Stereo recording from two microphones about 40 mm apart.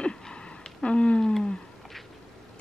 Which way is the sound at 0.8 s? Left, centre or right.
Left.